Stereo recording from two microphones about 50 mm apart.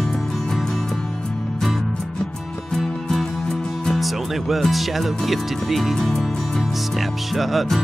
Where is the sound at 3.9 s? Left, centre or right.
Centre.